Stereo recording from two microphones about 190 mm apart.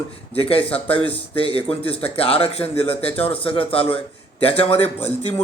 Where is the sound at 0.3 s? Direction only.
30° left (ahead or behind).